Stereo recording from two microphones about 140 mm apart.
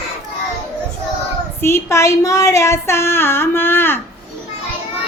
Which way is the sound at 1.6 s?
20° left (ahead or behind).